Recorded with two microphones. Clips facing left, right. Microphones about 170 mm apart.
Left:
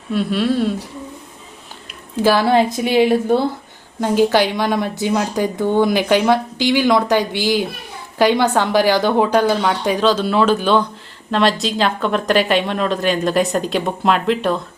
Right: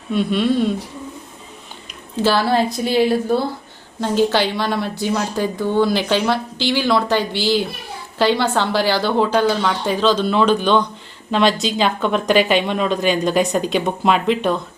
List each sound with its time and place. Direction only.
0.1 s speech: 5° left (ahead or behind)
1.9 s a sound: 10° left (ahead or behind)
2.9 s a woman's voice: 15° left (ahead or behind); by 14.6 s centre (ahead or behind)